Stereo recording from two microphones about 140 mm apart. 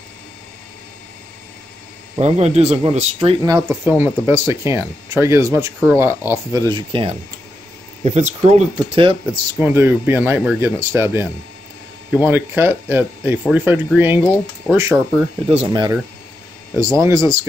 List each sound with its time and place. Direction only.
2.1 s speech: 50° right (ahead or behind)
3.4 s speech: 25° right (ahead or behind)
6.9 s speech: 40° right (ahead or behind)
8.0 s speech: 60° right (ahead or behind)
8.5 s speech: 45° right (ahead or behind)
9.6 s speech: 15° right (ahead or behind)
15.7 s speech: 30° right (ahead or behind)